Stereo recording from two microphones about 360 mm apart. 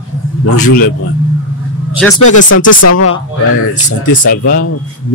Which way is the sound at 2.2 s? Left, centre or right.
Left.